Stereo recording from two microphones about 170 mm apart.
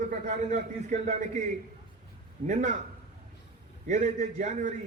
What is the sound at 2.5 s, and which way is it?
Speech, 45° right (ahead or behind).